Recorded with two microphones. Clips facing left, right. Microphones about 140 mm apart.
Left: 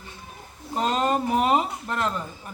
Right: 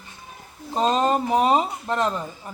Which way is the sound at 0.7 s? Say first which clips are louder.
Right 3 dB; 20° right (ahead or behind).